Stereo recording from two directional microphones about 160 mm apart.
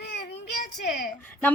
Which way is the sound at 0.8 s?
60° left (ahead or behind).